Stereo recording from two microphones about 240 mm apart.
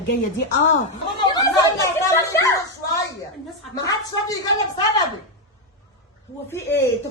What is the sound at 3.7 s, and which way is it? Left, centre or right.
A woman's voice, centre.